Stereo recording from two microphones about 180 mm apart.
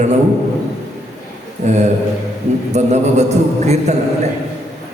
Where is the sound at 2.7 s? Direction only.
40° right (ahead or behind).